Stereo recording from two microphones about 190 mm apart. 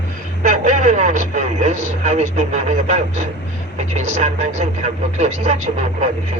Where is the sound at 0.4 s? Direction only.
40° right (ahead or behind).